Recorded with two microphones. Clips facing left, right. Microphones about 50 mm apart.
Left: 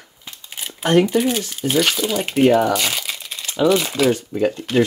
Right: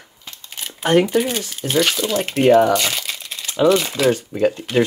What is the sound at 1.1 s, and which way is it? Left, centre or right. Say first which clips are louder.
Speech: left 1 dB; centre.